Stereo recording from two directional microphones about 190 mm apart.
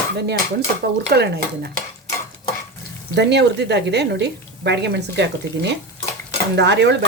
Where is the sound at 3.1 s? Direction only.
65° right (ahead or behind).